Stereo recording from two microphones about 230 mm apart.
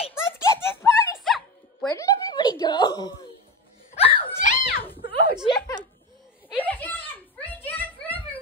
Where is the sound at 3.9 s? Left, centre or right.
Left.